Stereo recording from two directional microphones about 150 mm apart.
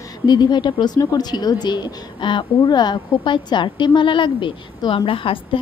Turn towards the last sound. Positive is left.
turn(degrees=35)  # may be behind; listen again after turning